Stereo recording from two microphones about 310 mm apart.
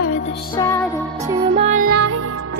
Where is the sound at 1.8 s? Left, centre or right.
Right.